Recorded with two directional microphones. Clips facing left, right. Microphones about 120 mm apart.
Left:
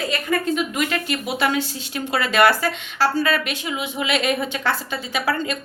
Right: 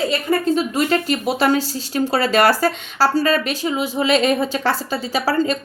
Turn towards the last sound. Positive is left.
turn(degrees=-35)  # may be behind; listen again after turning